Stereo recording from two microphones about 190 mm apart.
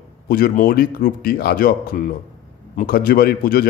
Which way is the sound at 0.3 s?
50° left (ahead or behind).